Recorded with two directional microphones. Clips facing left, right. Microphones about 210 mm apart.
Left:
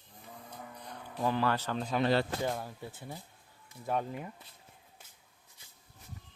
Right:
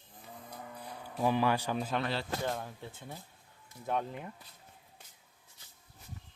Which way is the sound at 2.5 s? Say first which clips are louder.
Left 1 dB; 5° left (ahead or behind).